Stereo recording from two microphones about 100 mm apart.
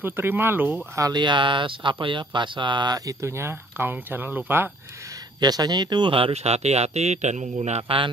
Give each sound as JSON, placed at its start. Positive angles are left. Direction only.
{"t": 0.0, "sound": "speech", "side_deg": -20}
{"t": 0.9, "sound": "speech", "side_deg": -35}
{"t": 1.2, "sound": "speech", "side_deg": -55}
{"t": 5.4, "sound": "speech", "side_deg": -40}